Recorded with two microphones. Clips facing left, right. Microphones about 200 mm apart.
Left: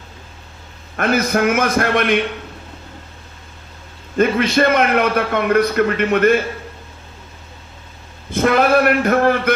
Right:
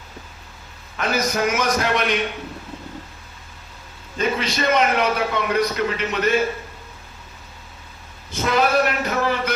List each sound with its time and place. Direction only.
0.9 s a man's voice: 55° left (ahead or behind)
4.2 s a man's voice: 55° left (ahead or behind)
8.3 s a man's voice: 55° left (ahead or behind)